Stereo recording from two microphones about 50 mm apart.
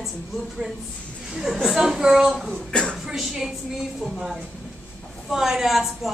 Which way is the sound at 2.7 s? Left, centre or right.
Centre.